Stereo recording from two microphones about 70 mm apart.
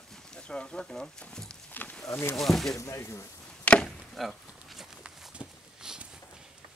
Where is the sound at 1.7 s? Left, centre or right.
Left.